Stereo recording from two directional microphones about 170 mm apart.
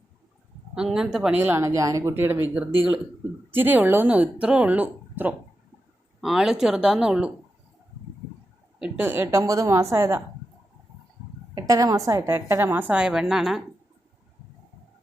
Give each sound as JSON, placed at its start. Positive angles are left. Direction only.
{"t": 0.8, "sound": "speech", "side_deg": -5}
{"t": 8.8, "sound": "speech", "side_deg": -10}
{"t": 11.5, "sound": "speech", "side_deg": -20}